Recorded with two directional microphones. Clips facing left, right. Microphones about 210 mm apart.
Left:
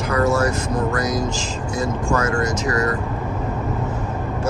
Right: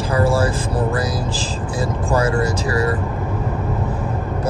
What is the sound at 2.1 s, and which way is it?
Speech, 35° right (ahead or behind).